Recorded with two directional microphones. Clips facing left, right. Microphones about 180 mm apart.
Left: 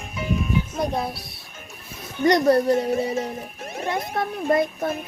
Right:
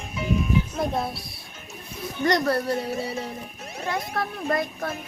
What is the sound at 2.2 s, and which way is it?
Speech, 15° left (ahead or behind).